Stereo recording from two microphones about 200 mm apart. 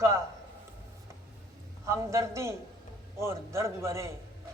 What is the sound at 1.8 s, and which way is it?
A man's voice, 15° right (ahead or behind).